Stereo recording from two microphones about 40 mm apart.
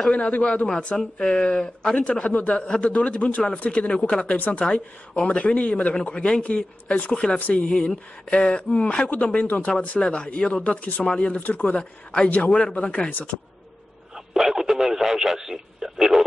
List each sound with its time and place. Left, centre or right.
0.1 s speech: left
2.3 s speech: left
2.6 s speech: left
6.1 s speech: left
7.3 s speech: left
8.3 s speech: left
9.9 s speech: left
11.4 s speech: left
14.1 s speech: centre